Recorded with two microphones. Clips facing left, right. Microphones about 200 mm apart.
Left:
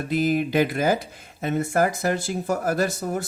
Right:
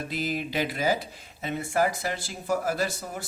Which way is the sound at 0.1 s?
50° left (ahead or behind).